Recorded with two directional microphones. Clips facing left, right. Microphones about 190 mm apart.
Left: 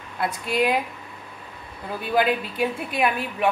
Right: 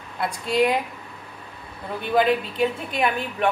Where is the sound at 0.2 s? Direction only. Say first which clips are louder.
Right 2 dB; 5° left (ahead or behind).